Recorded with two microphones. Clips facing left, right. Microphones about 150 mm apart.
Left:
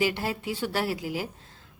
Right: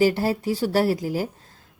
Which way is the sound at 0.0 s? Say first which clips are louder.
Right 7 dB; 40° right (ahead or behind).